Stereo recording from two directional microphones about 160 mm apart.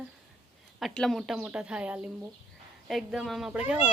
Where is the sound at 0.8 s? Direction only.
Centre (ahead or behind).